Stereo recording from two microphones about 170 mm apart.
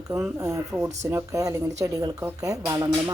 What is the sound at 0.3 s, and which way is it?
A woman's voice, 20° right (ahead or behind).